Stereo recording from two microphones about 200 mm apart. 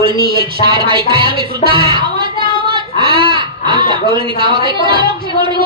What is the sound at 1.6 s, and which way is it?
Speech, 30° left (ahead or behind).